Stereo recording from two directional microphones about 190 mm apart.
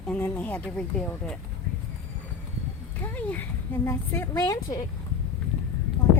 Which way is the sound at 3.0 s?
10° left (ahead or behind).